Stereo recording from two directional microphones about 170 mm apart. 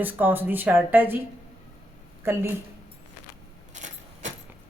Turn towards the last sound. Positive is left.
turn(degrees=-45)  # may be behind; listen again after turning